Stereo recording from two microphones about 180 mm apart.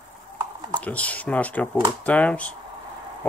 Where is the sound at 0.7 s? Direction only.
10° left (ahead or behind).